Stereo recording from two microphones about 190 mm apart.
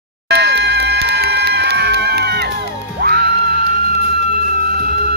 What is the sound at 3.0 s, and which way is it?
Music, 55° right (ahead or behind).